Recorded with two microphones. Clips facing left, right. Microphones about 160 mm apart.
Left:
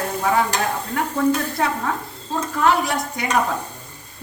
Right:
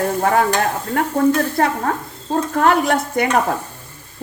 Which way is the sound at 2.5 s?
60° right (ahead or behind).